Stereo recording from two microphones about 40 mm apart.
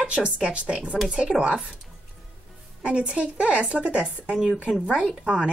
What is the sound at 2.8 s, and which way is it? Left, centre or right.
Speech, right.